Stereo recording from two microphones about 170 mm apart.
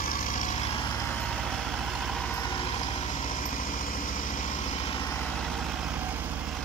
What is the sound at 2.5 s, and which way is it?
Vehicle, 35° left (ahead or behind).